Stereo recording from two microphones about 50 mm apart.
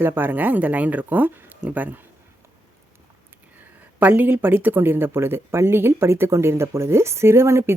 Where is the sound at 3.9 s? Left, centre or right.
Right.